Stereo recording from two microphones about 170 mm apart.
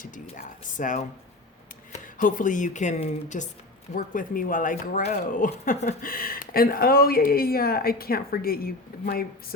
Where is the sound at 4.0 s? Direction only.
55° left (ahead or behind).